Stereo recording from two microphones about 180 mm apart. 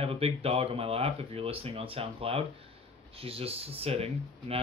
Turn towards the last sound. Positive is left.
turn(degrees=-35)  # may be behind; listen again after turning